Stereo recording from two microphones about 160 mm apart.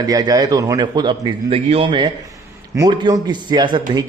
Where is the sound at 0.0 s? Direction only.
25° right (ahead or behind).